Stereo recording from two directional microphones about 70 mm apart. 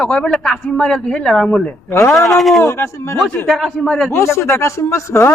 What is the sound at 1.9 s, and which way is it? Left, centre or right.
Speech, left.